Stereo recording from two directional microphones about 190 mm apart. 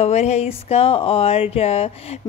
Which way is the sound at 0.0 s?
35° left (ahead or behind).